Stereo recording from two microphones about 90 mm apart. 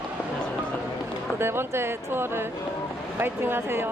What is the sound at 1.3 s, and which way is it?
Speech, 25° right (ahead or behind).